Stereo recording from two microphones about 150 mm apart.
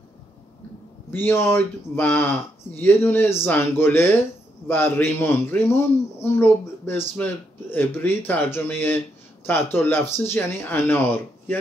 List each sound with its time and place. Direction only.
1.1 s a man's voice: 15° left (ahead or behind)